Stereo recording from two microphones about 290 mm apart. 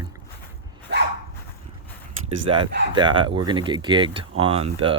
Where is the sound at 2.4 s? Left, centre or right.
Centre.